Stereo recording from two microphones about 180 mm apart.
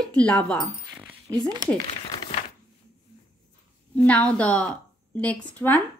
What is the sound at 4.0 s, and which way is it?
A woman's voice, 10° left (ahead or behind).